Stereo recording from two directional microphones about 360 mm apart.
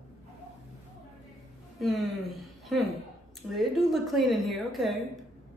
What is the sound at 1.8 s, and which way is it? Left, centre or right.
A woman's voice, centre.